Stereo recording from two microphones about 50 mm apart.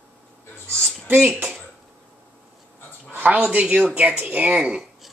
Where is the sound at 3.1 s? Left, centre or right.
Right.